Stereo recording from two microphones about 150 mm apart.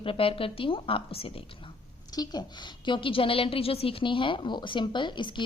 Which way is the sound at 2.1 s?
25° left (ahead or behind).